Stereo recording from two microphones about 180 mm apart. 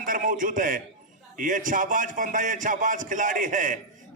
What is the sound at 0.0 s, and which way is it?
A man's voice, 50° right (ahead or behind).